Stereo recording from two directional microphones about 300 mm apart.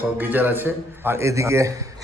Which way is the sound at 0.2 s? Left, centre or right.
Centre.